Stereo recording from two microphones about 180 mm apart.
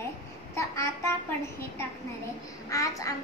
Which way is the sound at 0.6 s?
15° left (ahead or behind).